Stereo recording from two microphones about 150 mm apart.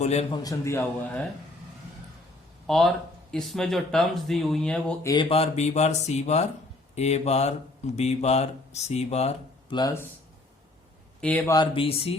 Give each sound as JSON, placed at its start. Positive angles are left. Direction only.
{"t": 0.0, "sound": "speech", "side_deg": 45}
{"t": 0.3, "sound": "a man's voice", "side_deg": 20}
{"t": 2.6, "sound": "speech", "side_deg": 0}
{"t": 5.0, "sound": "speech", "side_deg": 30}
{"t": 9.7, "sound": "speech", "side_deg": 25}
{"t": 11.2, "sound": "speech", "side_deg": 10}
{"t": 11.4, "sound": "speech", "side_deg": 30}